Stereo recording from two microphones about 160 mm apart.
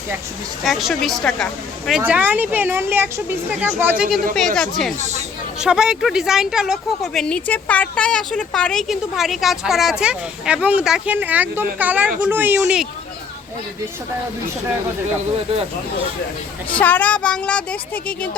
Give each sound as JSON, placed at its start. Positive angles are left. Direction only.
{"t": 0.6, "sound": "a woman's voice", "side_deg": 0}
{"t": 1.9, "sound": "speech", "side_deg": -10}
{"t": 4.9, "sound": "speech", "side_deg": -45}
{"t": 5.5, "sound": "a woman's voice", "side_deg": -5}
{"t": 16.8, "sound": "speech", "side_deg": 10}